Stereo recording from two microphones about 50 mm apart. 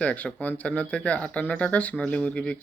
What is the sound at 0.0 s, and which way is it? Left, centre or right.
A man's voice, left.